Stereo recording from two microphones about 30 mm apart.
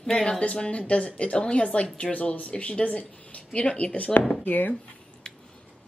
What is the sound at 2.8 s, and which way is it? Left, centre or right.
A woman's voice, left.